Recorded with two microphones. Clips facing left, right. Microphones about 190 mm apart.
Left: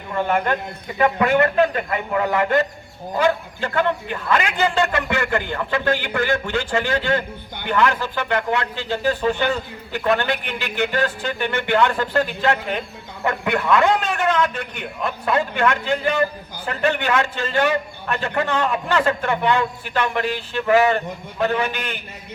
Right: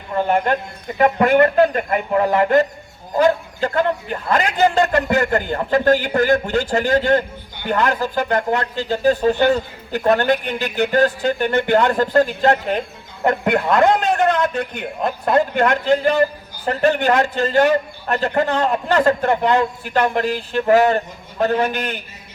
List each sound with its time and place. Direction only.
0.9 s a man's voice: 40° right (ahead or behind)